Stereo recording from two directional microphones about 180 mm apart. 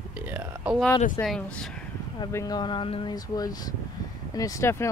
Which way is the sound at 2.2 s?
20° left (ahead or behind).